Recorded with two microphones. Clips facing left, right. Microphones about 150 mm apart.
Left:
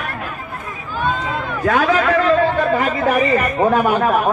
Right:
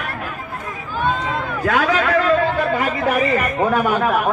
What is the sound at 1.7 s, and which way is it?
Speech, 30° left (ahead or behind).